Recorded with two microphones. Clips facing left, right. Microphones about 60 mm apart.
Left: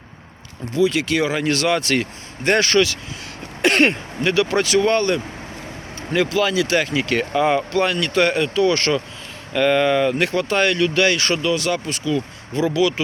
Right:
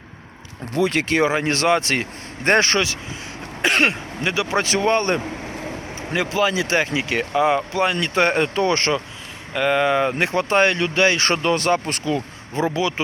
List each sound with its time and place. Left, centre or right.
0.7 s speech: right
3.6 s speech: centre; by 9.0 s right
9.5 s speech: centre
11.3 s speech: right